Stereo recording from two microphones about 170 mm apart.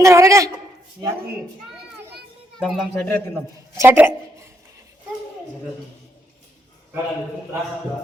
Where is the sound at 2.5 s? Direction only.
5° left (ahead or behind).